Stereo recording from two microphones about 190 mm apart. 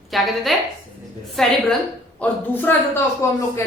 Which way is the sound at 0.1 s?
Centre (ahead or behind).